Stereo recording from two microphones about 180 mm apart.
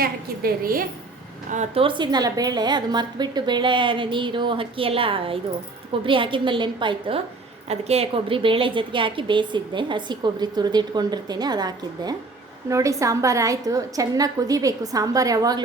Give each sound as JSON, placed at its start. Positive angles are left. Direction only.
{"t": 0.0, "sound": "a woman's voice", "side_deg": -55}
{"t": 1.5, "sound": "a woman's voice", "side_deg": -40}
{"t": 1.8, "sound": "a woman's voice", "side_deg": -25}